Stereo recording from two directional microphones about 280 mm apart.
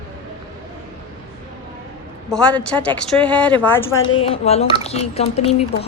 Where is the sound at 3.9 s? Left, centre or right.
Left.